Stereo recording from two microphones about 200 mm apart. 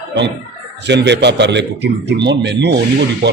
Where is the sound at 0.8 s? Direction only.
60° right (ahead or behind).